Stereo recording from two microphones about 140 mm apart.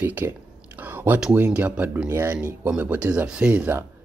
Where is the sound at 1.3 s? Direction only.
10° right (ahead or behind).